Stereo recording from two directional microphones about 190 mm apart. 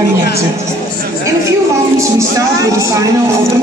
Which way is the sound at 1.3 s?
15° right (ahead or behind).